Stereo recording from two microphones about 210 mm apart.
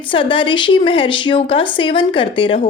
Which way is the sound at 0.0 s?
25° left (ahead or behind).